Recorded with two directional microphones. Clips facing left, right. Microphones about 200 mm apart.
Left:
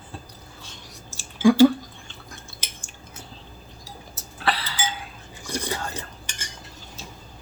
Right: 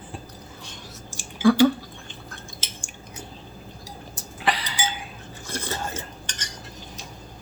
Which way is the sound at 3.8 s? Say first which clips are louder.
Right 1 dB; 15° right (ahead or behind).